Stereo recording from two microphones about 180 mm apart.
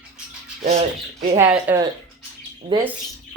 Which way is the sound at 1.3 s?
10° right (ahead or behind).